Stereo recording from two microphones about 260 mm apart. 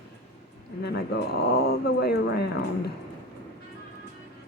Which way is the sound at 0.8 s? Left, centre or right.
Left.